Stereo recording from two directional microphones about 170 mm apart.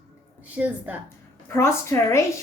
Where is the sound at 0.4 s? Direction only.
10° right (ahead or behind).